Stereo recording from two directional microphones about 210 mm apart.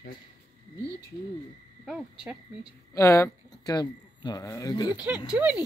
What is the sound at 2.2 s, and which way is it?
Speech, 5° right (ahead or behind).